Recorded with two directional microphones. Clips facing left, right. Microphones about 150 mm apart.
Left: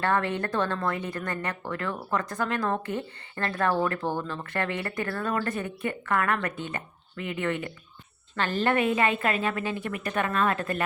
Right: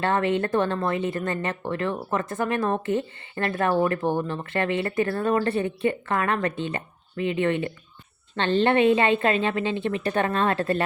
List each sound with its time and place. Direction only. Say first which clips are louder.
0.0 s speech: right 4 dB; 20° right (ahead or behind)